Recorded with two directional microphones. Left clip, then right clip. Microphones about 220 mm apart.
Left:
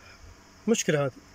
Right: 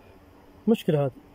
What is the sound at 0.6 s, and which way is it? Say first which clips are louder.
Speech: right 1 dB; 10° right (ahead or behind).